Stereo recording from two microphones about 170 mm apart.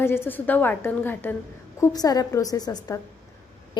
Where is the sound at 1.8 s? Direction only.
20° left (ahead or behind).